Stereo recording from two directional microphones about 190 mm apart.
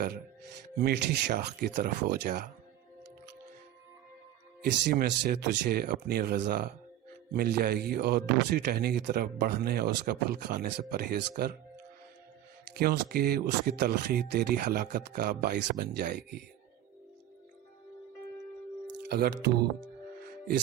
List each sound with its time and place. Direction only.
0.8 s a man's voice: 60° right (ahead or behind)
4.6 s a man's voice: 55° right (ahead or behind)
12.7 s a man's voice: 55° right (ahead or behind)
19.0 s speech: 60° right (ahead or behind)